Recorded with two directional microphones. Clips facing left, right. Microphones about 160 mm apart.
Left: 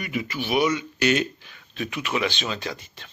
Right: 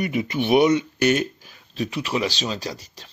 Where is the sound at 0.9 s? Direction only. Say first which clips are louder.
Right 2 dB; 45° right (ahead or behind).